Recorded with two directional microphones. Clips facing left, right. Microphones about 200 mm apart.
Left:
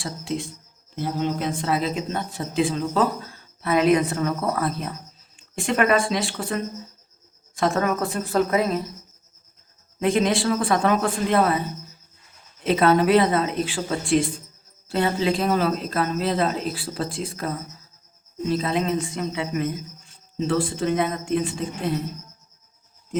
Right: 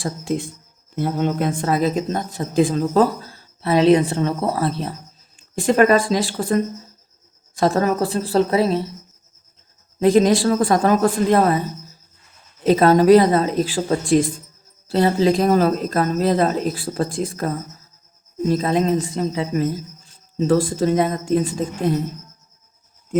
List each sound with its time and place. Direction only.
0.0 s speech: 50° right (ahead or behind); by 8.9 s 30° right (ahead or behind)
10.0 s speech: 40° right (ahead or behind)
12.6 s speech: 40° right (ahead or behind)